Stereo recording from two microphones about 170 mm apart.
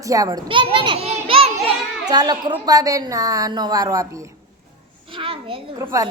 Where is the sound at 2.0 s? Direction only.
25° right (ahead or behind).